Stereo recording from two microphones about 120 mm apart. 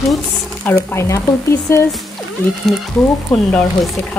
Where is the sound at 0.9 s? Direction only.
25° left (ahead or behind).